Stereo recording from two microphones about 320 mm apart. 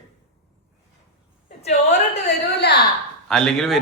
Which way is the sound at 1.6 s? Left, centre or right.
Left.